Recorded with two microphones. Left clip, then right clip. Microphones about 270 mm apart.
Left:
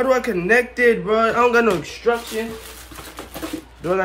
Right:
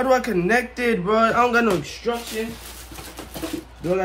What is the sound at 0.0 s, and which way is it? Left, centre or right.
Speech, centre.